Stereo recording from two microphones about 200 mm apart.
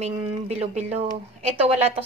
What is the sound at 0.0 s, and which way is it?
Speech, 30° right (ahead or behind).